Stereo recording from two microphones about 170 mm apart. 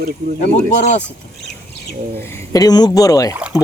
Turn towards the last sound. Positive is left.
turn(degrees=20)  # may be behind; listen again after turning